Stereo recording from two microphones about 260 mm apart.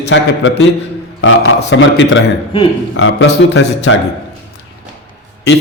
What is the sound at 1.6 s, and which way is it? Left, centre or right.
A man's voice, left.